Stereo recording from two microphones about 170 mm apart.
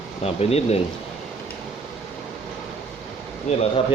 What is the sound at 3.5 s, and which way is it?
Speech, 40° left (ahead or behind).